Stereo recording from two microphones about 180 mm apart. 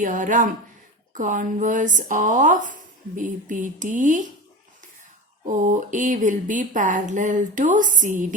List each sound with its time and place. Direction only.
0.0 s speech: 45° right (ahead or behind)
5.5 s speech: 45° right (ahead or behind)